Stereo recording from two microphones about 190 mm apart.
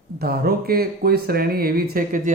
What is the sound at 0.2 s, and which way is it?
Speech, 50° right (ahead or behind).